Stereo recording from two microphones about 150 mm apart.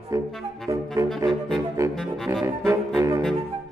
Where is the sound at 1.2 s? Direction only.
30° right (ahead or behind).